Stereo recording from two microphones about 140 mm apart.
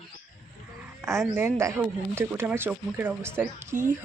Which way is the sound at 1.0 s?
20° right (ahead or behind).